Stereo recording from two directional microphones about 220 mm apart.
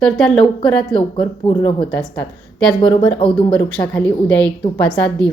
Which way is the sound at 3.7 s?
5° left (ahead or behind).